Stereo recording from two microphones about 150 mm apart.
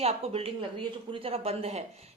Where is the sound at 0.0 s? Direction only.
40° right (ahead or behind).